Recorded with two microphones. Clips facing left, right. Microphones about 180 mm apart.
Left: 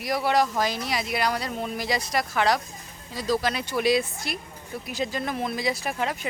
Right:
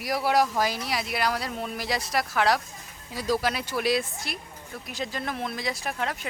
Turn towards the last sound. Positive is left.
turn(degrees=5)  # may be behind; listen again after turning